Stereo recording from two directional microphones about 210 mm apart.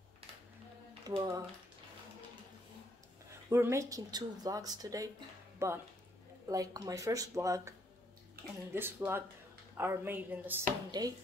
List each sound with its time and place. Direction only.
1.0 s speech: 20° right (ahead or behind)
3.4 s speech: 15° right (ahead or behind)
8.7 s speech: 10° right (ahead or behind)